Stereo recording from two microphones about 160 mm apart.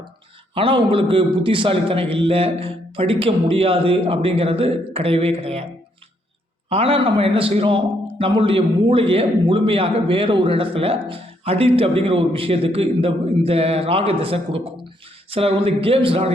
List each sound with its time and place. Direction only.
0.5 s a man's voice: 35° right (ahead or behind)
6.7 s a man's voice: 35° right (ahead or behind)